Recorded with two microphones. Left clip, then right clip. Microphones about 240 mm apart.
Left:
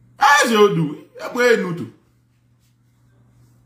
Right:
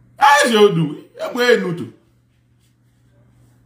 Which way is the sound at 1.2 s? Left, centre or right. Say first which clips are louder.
Even; centre.